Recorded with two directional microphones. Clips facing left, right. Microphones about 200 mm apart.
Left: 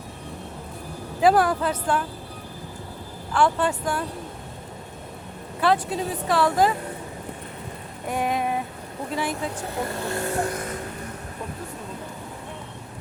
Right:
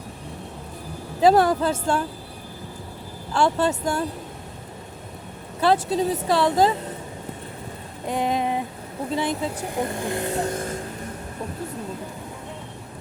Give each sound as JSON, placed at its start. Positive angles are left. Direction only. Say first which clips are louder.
{"t": 1.2, "sound": "speech", "louder": "right 2 dB", "side_deg": -25}
{"t": 3.3, "sound": "speech", "louder": "right 1 dB", "side_deg": -25}
{"t": 5.5, "sound": "speech", "louder": "right 2 dB", "side_deg": -30}
{"t": 8.0, "sound": "a sound", "louder": "right 2 dB", "side_deg": -25}
{"t": 9.1, "sound": "speech", "louder": "right 2 dB", "side_deg": -20}